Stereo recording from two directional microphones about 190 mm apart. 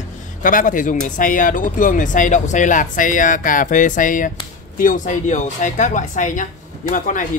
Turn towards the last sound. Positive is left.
turn(degrees=45)  # may be behind; listen again after turning